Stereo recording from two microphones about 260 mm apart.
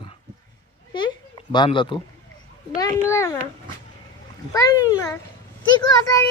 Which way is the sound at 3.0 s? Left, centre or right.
Centre.